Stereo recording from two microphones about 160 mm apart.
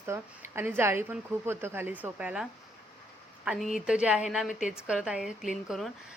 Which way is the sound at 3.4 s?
Centre (ahead or behind).